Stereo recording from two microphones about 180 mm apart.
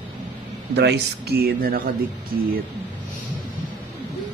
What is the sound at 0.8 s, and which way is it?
Speech, 70° right (ahead or behind).